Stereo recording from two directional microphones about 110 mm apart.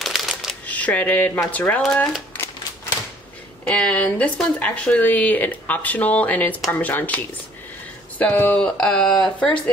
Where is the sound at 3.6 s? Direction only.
10° left (ahead or behind).